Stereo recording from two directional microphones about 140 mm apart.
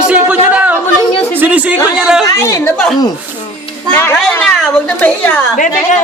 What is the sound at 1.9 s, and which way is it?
Speech, 5° right (ahead or behind).